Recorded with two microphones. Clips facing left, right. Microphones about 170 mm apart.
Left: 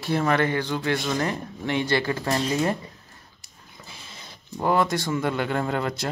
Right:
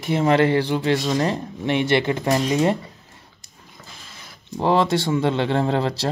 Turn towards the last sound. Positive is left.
turn(degrees=-25)  # may be behind; listen again after turning